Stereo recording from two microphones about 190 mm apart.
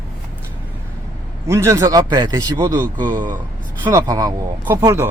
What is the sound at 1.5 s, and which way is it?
Speech, 15° right (ahead or behind).